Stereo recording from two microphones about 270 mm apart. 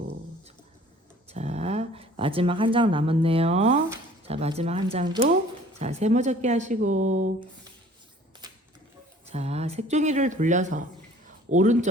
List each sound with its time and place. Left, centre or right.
1.3 s speech: right
9.3 s speech: right